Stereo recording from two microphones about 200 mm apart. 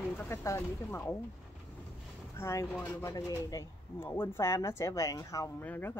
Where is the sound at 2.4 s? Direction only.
15° left (ahead or behind).